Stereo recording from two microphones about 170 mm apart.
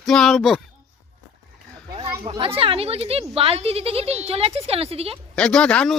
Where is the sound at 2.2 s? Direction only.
30° right (ahead or behind).